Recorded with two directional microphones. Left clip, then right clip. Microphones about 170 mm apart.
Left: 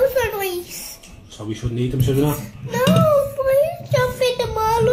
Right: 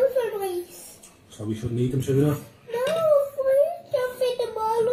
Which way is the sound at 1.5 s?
40° left (ahead or behind).